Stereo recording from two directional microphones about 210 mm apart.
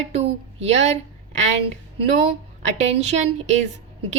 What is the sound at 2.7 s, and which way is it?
Speech, 30° right (ahead or behind).